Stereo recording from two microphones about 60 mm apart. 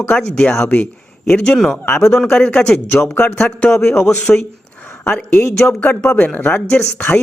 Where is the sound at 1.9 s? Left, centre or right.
Left.